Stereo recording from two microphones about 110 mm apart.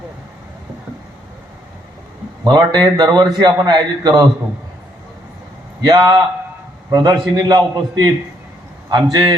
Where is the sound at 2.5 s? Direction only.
35° right (ahead or behind).